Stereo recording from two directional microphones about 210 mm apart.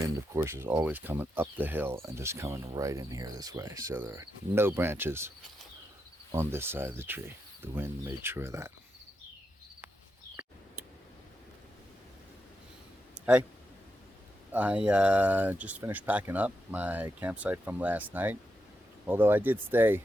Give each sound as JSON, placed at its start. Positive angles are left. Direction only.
{"t": 0.0, "sound": "speech", "side_deg": -10}
{"t": 6.3, "sound": "speech", "side_deg": -10}
{"t": 13.1, "sound": "a sound", "side_deg": -5}
{"t": 14.5, "sound": "speech", "side_deg": -5}